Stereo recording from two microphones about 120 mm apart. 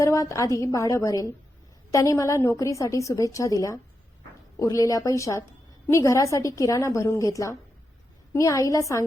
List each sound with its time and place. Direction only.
0.0 s a woman's voice: 25° left (ahead or behind)